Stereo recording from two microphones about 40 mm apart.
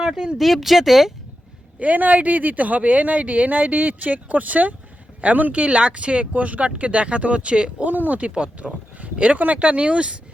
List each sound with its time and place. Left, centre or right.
0.0 s speech: centre
0.3 s speech: centre
1.8 s speech: right
7.9 s speech: right
8.3 s speech: right